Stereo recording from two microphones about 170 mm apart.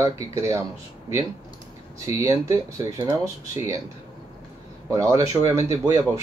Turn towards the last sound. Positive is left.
turn(degrees=-15)  # may be behind; listen again after turning